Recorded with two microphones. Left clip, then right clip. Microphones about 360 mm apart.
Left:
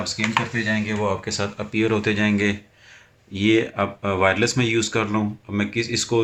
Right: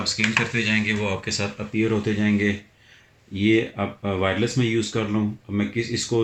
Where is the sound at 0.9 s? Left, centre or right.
Left.